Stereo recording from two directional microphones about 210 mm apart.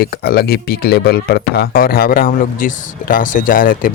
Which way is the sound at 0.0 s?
50° left (ahead or behind).